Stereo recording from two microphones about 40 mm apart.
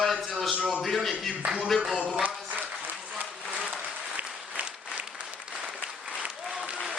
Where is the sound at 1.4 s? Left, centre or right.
Right.